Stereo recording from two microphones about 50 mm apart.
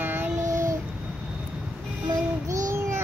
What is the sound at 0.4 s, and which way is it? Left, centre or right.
Child singing, right.